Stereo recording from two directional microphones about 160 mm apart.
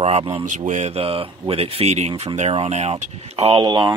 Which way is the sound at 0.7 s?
45° right (ahead or behind).